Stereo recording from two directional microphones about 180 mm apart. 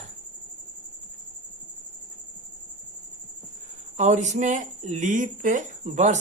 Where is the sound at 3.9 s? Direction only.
40° right (ahead or behind).